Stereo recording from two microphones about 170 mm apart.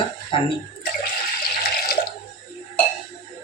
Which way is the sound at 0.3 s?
30° left (ahead or behind).